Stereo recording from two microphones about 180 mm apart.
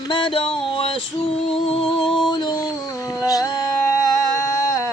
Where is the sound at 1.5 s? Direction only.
30° left (ahead or behind).